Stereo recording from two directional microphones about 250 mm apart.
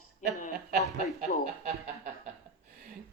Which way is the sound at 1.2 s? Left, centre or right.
Right.